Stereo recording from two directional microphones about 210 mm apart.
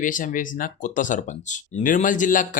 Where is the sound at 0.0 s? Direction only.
40° left (ahead or behind).